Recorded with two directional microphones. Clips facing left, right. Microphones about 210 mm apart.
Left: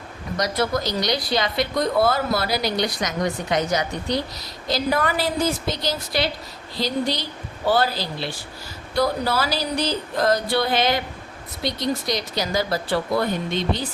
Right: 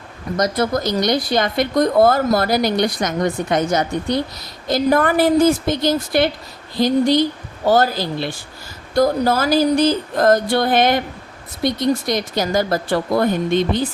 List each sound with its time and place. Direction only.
0.3 s speech: 45° right (ahead or behind)